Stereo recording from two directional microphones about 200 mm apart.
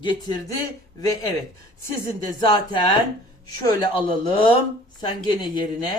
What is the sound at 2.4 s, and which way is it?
Speech, 25° left (ahead or behind).